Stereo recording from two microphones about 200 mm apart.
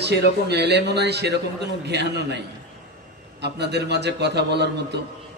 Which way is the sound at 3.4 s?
55° right (ahead or behind).